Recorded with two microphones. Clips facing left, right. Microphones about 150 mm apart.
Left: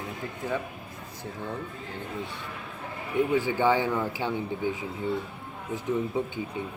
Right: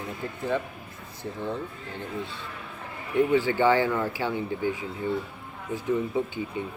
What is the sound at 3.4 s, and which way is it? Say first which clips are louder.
Speech: right 2 dB; 15° left (ahead or behind).